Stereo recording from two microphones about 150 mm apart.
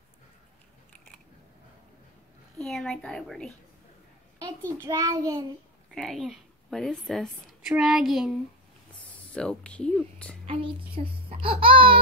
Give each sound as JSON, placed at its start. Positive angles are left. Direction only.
{"t": 2.6, "sound": "a child's voice", "side_deg": 5}
{"t": 4.8, "sound": "child singing", "side_deg": -25}
{"t": 5.9, "sound": "a woman's voice", "side_deg": 0}
{"t": 9.3, "sound": "speech", "side_deg": 5}
{"t": 10.4, "sound": "a woman's voice", "side_deg": -35}